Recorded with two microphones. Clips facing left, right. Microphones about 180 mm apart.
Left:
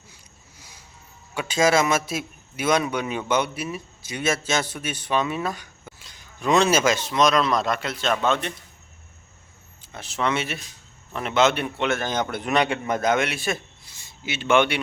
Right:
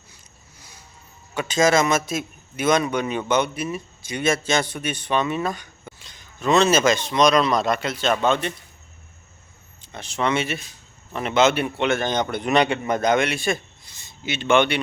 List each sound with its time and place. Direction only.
1.3 s a man's voice: 10° left (ahead or behind)
9.8 s a man's voice: 5° left (ahead or behind)